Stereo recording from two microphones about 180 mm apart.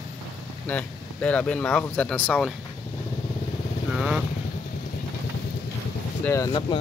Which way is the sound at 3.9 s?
5° right (ahead or behind).